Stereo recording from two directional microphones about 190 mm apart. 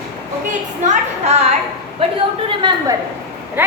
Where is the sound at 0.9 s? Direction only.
35° right (ahead or behind).